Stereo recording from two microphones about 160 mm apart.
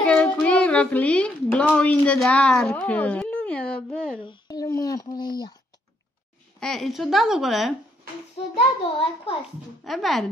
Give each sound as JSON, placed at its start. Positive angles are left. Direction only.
{"t": 0.0, "sound": "a child's voice", "side_deg": 5}
{"t": 4.3, "sound": "speech", "side_deg": 25}
{"t": 6.6, "sound": "a woman's voice", "side_deg": 0}
{"t": 8.4, "sound": "a child's voice", "side_deg": 35}
{"t": 9.8, "sound": "a woman's voice", "side_deg": 0}